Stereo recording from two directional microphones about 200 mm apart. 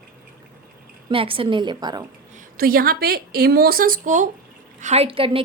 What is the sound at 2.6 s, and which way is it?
A woman's voice, 45° right (ahead or behind).